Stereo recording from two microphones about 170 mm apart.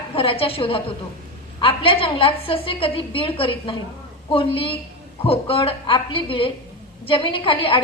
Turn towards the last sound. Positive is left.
turn(degrees=30)  # may be behind; listen again after turning